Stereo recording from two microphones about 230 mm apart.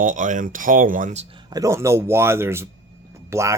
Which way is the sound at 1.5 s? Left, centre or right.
Centre.